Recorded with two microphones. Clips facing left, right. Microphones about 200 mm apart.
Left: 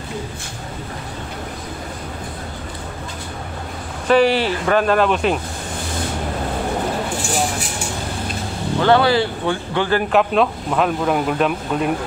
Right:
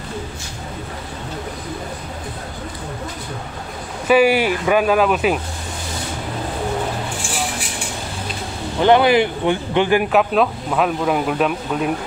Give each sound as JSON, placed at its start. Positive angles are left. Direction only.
{"t": 4.1, "sound": "speech", "side_deg": -10}
{"t": 8.7, "sound": "speech", "side_deg": -15}
{"t": 10.0, "sound": "speech", "side_deg": 0}